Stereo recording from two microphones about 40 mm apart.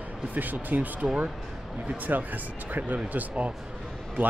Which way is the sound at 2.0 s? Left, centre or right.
Right.